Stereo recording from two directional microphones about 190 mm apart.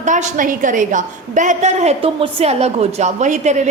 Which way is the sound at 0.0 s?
40° right (ahead or behind).